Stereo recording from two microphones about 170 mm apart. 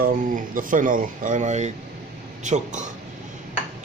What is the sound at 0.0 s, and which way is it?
A man's voice, 50° right (ahead or behind).